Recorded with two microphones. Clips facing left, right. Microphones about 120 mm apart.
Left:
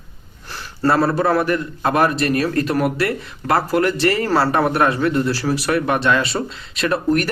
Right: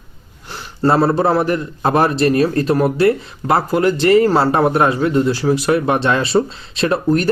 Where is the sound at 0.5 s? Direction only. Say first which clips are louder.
Right 2 dB; 20° right (ahead or behind).